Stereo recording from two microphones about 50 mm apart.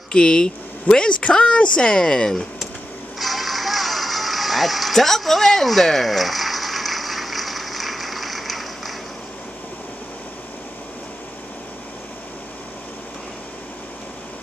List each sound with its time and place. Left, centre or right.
0.1 s speech: centre
3.2 s music: centre